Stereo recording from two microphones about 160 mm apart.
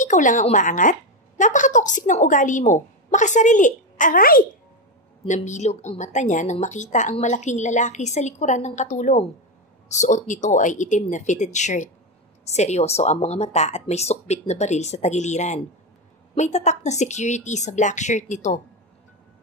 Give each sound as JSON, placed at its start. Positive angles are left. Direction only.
{"t": 0.0, "sound": "speech", "side_deg": 50}
{"t": 5.2, "sound": "speech", "side_deg": 50}